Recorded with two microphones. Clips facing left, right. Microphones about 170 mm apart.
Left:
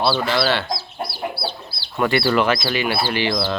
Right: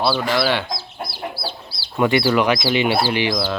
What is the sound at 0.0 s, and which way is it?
Speech, 10° right (ahead or behind).